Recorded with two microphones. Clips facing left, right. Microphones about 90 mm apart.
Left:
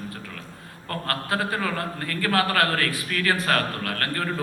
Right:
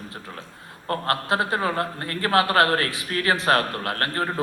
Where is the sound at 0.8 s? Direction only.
25° right (ahead or behind).